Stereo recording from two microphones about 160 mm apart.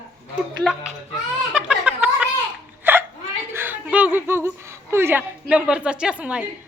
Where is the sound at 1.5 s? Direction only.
5° right (ahead or behind).